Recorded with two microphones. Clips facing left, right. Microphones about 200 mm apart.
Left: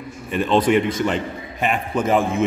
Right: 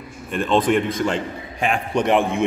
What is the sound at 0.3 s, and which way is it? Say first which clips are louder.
A man's voice: left 1 dB; 5° left (ahead or behind).